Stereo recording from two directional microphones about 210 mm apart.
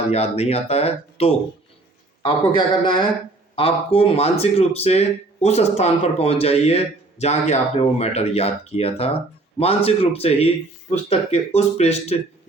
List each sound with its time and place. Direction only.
0.1 s speech: 30° left (ahead or behind)